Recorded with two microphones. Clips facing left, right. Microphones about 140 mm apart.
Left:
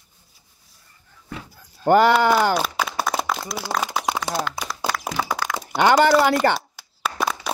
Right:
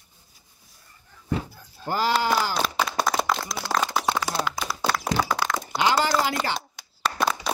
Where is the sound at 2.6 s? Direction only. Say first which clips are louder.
Left 1 dB; 5° left (ahead or behind).